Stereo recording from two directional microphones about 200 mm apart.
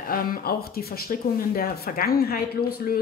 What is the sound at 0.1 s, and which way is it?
Speech, 45° left (ahead or behind).